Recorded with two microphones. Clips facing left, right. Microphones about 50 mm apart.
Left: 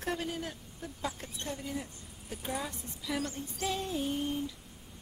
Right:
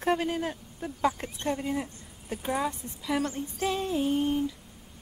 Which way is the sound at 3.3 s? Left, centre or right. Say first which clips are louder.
Right 5 dB; right.